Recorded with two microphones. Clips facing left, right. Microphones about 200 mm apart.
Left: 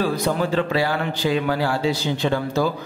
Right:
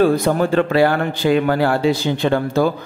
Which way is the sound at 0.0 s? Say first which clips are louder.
Right 6 dB; 50° right (ahead or behind).